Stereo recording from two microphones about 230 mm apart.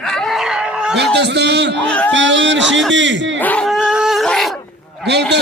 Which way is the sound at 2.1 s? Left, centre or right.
Right.